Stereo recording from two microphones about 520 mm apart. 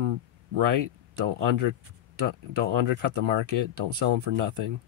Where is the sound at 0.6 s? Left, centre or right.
Right.